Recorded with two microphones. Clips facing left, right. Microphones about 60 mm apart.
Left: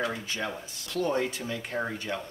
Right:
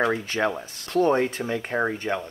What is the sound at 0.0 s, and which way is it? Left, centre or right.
Speech, right.